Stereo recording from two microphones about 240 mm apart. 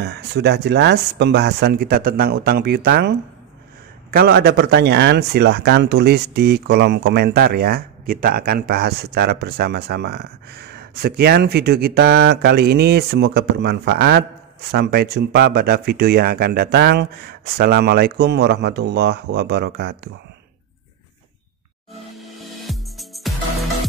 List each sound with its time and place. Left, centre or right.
0.0 s speech: right
22.4 s music: centre